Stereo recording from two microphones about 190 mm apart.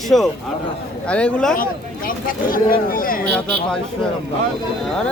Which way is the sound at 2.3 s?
50° left (ahead or behind).